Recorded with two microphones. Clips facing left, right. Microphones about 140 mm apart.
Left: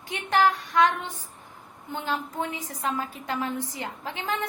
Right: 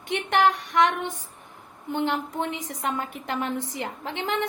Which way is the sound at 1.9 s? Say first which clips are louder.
Right 4 dB; 20° right (ahead or behind).